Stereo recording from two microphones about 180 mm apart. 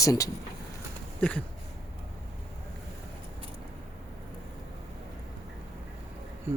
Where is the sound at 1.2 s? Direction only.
5° left (ahead or behind).